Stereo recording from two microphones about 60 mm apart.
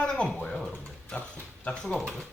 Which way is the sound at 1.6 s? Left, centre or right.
Centre.